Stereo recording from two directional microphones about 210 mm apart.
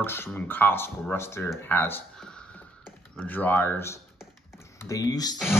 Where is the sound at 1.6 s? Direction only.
10° left (ahead or behind).